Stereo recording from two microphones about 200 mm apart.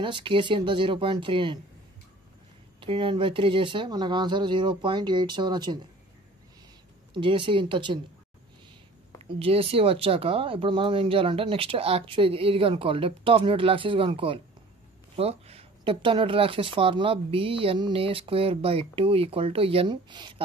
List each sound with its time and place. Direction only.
0.0 s speech: 25° right (ahead or behind)
2.8 s speech: 25° right (ahead or behind)
7.2 s speech: 25° right (ahead or behind)
9.4 s speech: 30° right (ahead or behind)